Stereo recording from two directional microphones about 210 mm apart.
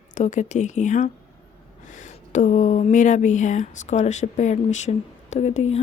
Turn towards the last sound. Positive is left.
turn(degrees=35)  # may be behind; listen again after turning